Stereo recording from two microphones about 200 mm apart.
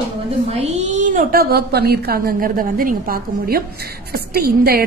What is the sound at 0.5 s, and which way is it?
A woman's voice, 35° right (ahead or behind).